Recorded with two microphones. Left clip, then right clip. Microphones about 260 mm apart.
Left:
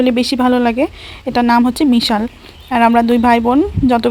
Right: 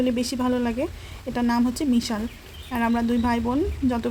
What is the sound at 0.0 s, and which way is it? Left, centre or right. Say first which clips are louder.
Speech: left 11 dB; left.